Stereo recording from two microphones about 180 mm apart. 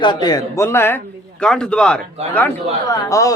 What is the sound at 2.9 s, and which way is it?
Speech, 20° left (ahead or behind).